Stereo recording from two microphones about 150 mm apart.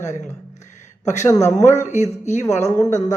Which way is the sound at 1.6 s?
50° left (ahead or behind).